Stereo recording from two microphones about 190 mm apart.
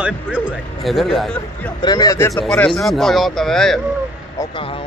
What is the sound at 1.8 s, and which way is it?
Speech, 20° left (ahead or behind).